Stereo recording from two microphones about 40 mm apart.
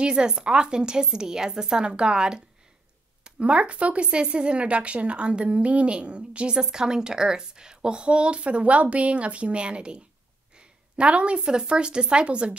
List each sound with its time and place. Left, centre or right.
0.0 s a woman's voice: centre
6.5 s a woman's voice: centre